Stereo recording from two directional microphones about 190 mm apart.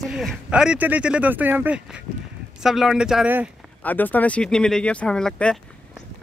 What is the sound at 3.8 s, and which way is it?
Speech, 10° left (ahead or behind).